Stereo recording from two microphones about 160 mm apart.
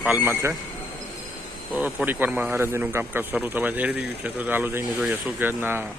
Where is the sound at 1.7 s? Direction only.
10° right (ahead or behind).